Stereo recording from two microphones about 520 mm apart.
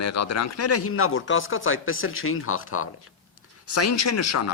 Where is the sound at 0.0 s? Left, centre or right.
Left.